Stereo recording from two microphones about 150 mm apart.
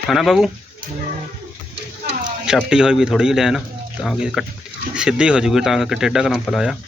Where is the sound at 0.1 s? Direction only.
Centre (ahead or behind).